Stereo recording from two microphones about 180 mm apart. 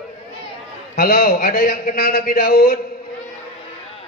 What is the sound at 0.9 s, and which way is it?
A man's voice, 55° left (ahead or behind).